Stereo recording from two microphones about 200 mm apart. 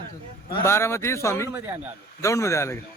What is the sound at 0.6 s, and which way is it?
Speech, 15° left (ahead or behind).